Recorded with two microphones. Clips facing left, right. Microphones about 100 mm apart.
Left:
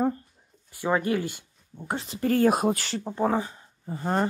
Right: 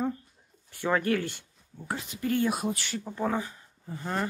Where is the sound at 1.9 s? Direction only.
35° left (ahead or behind).